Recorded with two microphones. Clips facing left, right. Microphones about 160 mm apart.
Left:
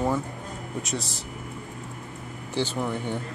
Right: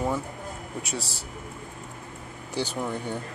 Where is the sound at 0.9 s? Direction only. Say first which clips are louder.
Left 2 dB; 30° right (ahead or behind).